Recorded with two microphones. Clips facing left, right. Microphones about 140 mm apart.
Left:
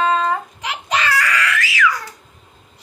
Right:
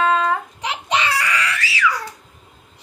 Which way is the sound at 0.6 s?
25° right (ahead or behind).